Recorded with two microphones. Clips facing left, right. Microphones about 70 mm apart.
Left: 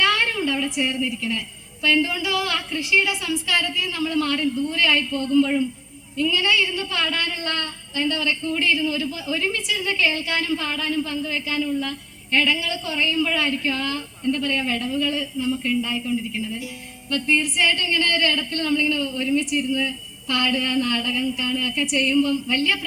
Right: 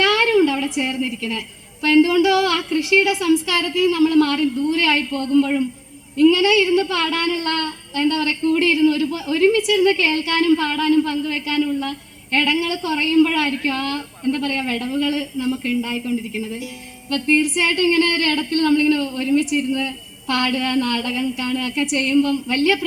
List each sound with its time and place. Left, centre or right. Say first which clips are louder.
0.1 s a sound: right 7 dB; right
0.8 s a woman's voice: right 2 dB; right
1.0 s a woman's voice: right 1 dB; right
17.7 s a woman's voice: right 6 dB; right